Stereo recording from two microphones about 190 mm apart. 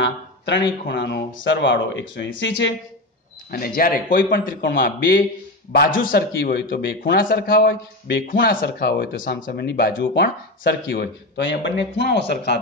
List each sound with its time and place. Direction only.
0.0 s speech: 65° left (ahead or behind)
3.4 s a man's voice: 50° left (ahead or behind)